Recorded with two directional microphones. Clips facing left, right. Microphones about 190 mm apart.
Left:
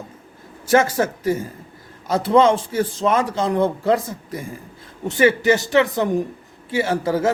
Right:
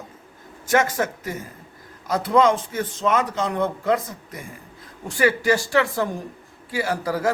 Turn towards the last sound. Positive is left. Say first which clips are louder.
# left 4 dB
turn(degrees=25)  # may be behind; listen again after turning